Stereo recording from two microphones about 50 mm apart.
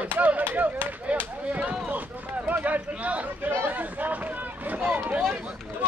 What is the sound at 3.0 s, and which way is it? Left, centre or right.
Speech, right.